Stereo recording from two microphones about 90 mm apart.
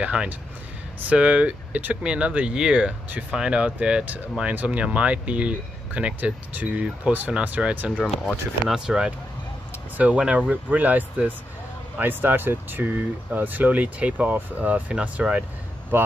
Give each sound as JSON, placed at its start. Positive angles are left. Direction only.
{"t": 0.0, "sound": "speech", "side_deg": -10}
{"t": 8.6, "sound": "speech", "side_deg": -10}